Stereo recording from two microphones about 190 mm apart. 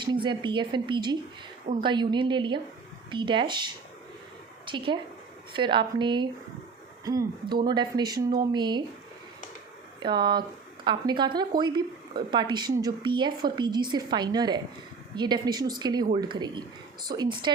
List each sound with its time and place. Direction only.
0.0 s a woman's voice: 25° right (ahead or behind)
10.0 s a woman's voice: 25° right (ahead or behind)